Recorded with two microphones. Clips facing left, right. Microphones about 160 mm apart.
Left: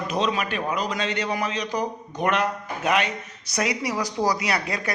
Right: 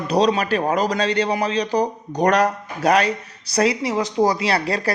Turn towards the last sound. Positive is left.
turn(degrees=-35)  # may be behind; listen again after turning